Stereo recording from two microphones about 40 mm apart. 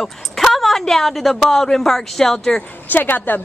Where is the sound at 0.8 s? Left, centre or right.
Centre.